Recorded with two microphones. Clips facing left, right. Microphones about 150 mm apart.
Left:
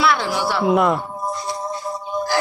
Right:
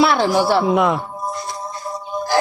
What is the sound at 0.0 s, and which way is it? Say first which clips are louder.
Speech: right 4 dB; 30° right (ahead or behind).